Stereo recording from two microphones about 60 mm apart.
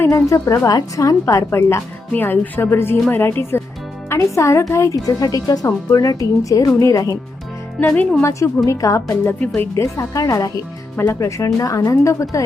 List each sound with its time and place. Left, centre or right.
0.1 s a woman's voice: left
1.2 s speech: left
1.5 s speech: left
2.1 s a woman's voice: left
4.1 s a woman's voice: left
7.8 s a woman's voice: left
8.2 s a woman's voice: left
10.9 s speech: left